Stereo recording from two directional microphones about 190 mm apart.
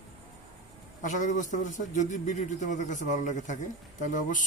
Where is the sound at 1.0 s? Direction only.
40° left (ahead or behind).